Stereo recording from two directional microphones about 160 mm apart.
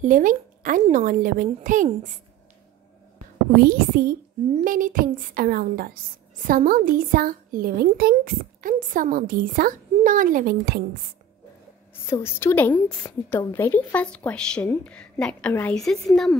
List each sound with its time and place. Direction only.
0.0 s a woman's voice: 55° right (ahead or behind)
3.5 s a woman's voice: 70° right (ahead or behind)
12.1 s a woman's voice: 15° left (ahead or behind)